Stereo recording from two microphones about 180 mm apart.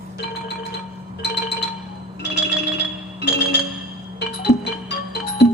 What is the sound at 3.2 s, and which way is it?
Music, 65° left (ahead or behind).